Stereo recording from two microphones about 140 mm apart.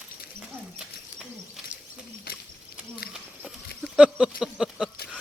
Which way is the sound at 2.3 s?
90° left.